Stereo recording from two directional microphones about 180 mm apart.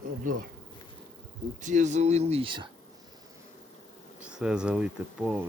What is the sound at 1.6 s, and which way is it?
Speech, 40° right (ahead or behind).